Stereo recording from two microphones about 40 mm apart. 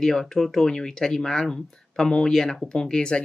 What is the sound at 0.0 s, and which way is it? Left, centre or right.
Speech, centre.